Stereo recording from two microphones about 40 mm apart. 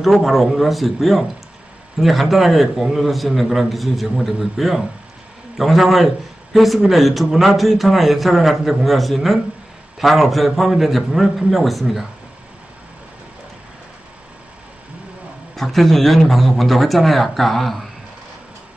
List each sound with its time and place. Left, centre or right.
0.0 s a man's voice: centre
15.5 s a man's voice: centre